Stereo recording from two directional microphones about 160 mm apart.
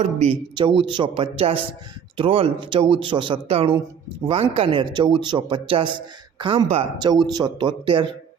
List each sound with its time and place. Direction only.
0.0 s speech: 45° right (ahead or behind)
0.5 s speech: 30° right (ahead or behind)
7.3 s speech: 25° right (ahead or behind)